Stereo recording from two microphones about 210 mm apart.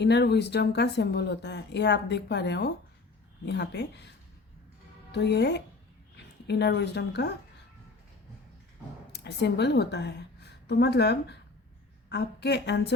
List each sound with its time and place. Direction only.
0.0 s speech: 55° left (ahead or behind)
5.1 s speech: 55° left (ahead or behind)
9.1 s a woman's voice: 55° left (ahead or behind)